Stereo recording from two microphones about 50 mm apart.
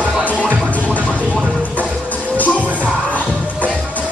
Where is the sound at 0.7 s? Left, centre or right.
Left.